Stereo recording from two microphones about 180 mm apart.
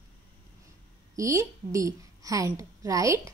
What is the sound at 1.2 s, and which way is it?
A woman's voice, 15° right (ahead or behind).